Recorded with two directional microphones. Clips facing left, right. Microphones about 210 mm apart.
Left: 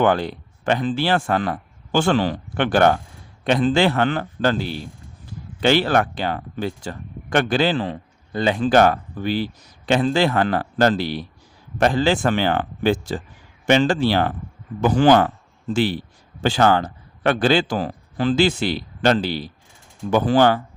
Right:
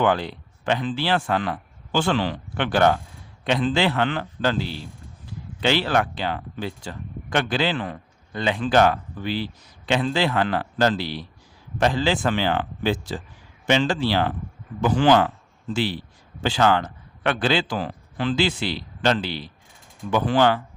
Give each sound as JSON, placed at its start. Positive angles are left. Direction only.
{"t": 0.0, "sound": "speech", "side_deg": 50}
{"t": 7.8, "sound": "a man's voice", "side_deg": 30}